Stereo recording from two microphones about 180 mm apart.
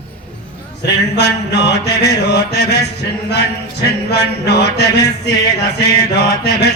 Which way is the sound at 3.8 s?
70° left (ahead or behind).